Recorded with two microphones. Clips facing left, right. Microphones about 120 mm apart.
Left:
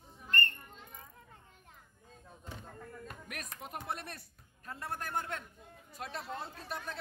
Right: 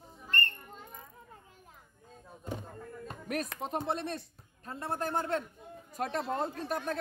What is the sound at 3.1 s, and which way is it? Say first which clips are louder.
Music: right 11 dB; 35° right (ahead or behind).